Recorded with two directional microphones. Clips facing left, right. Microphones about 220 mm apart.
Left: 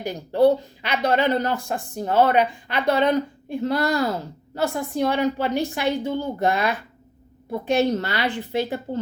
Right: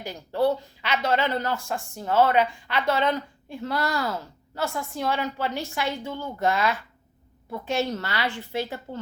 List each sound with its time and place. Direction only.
0.0 s a woman's voice: 15° left (ahead or behind)